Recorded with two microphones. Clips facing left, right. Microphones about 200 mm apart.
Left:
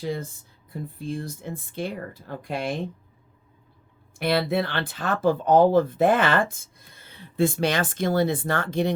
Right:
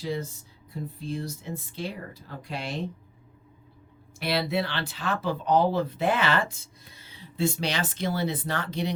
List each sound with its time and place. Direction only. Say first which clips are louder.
0.0 s speech: left 2 dB; 55° left (ahead or behind)
4.2 s speech: left 4 dB; 50° left (ahead or behind)